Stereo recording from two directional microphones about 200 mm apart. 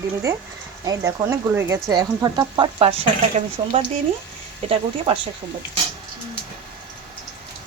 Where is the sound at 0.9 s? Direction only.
15° right (ahead or behind).